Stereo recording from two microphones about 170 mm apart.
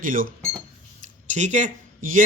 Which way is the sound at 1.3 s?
45° right (ahead or behind).